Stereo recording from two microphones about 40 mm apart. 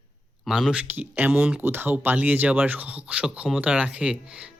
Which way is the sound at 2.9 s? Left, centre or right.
Right.